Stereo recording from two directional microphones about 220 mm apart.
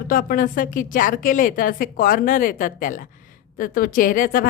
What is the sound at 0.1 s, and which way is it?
A woman's voice, 40° left (ahead or behind).